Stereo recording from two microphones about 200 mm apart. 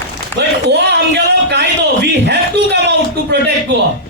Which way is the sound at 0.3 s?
60° right (ahead or behind).